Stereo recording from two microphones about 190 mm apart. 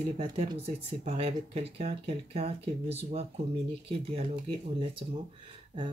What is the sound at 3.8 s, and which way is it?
Chopping, 30° right (ahead or behind).